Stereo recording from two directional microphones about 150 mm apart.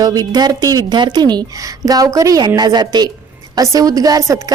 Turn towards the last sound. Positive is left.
turn(degrees=-25)  # may be behind; listen again after turning